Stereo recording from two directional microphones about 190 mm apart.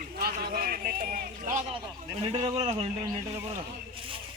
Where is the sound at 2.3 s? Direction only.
30° right (ahead or behind).